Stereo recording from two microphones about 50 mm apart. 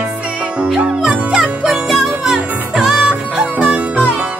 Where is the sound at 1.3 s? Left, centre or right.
Centre.